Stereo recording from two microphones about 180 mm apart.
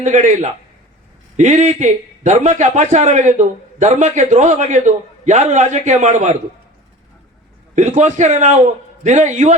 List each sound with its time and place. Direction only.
0.0 s a man's voice: 45° right (ahead or behind)
7.8 s a man's voice: 40° right (ahead or behind)